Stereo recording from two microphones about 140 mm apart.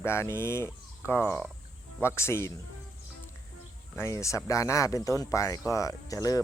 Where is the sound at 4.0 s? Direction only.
20° left (ahead or behind).